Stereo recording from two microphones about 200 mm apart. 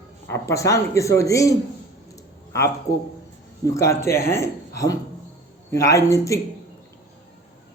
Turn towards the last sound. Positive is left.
turn(degrees=15)  # may be behind; listen again after turning